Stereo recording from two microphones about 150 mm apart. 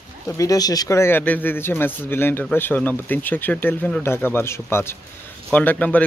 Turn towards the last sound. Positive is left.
turn(degrees=10)  # may be behind; listen again after turning